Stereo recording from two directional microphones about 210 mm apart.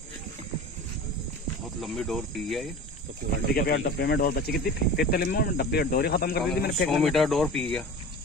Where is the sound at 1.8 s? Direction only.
Centre (ahead or behind).